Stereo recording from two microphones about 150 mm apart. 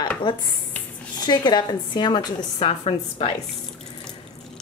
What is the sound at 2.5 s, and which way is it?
Speech, 40° left (ahead or behind).